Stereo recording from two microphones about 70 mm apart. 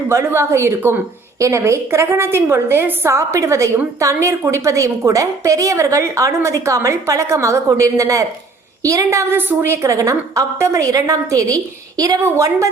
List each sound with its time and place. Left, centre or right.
0.1 s a woman's voice: right
1.4 s a woman's voice: right
3.1 s a woman's voice: right
12.4 s a woman's voice: right